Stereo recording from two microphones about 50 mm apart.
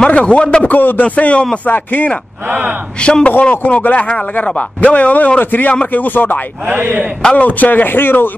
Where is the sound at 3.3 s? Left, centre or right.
Left.